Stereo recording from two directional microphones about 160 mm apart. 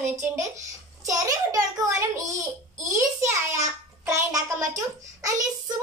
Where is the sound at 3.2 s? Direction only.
15° right (ahead or behind).